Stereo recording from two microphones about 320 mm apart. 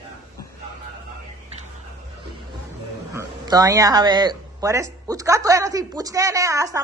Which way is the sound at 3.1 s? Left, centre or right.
Centre.